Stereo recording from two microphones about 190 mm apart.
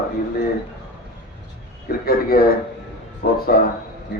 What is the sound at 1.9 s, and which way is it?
A man's voice, 50° left (ahead or behind).